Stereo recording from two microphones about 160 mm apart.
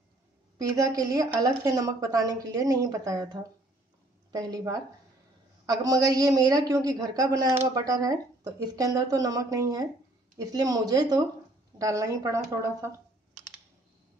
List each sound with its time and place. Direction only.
0.6 s a woman's voice: 20° right (ahead or behind)